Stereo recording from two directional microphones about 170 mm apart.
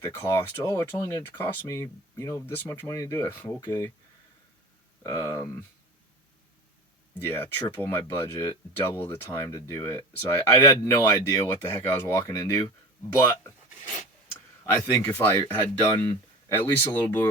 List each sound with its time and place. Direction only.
0.0 s speech: 15° left (ahead or behind)
5.0 s speech: 20° left (ahead or behind)
7.2 s speech: 15° left (ahead or behind)
14.7 s speech: 15° left (ahead or behind)